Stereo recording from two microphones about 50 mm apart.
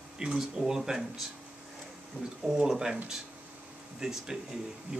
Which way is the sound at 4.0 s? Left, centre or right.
Centre.